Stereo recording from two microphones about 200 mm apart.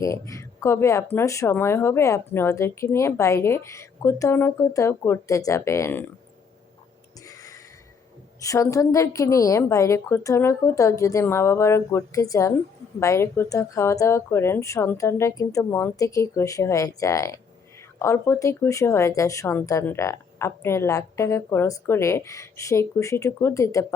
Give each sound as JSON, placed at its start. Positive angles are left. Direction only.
{"t": 0.0, "sound": "speech", "side_deg": 15}
{"t": 7.3, "sound": "a sound", "side_deg": 15}
{"t": 8.4, "sound": "speech", "side_deg": 15}